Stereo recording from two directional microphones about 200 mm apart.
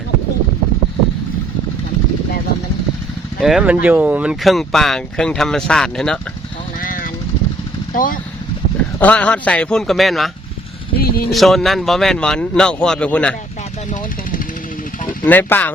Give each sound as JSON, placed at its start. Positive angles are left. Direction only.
{"t": 3.4, "sound": "speech", "side_deg": -5}
{"t": 6.8, "sound": "vehicle", "side_deg": 45}
{"t": 7.9, "sound": "speech", "side_deg": 45}
{"t": 9.0, "sound": "speech", "side_deg": 5}
{"t": 10.9, "sound": "speech", "side_deg": 50}
{"t": 11.3, "sound": "speech", "side_deg": 0}
{"t": 15.2, "sound": "speech", "side_deg": 10}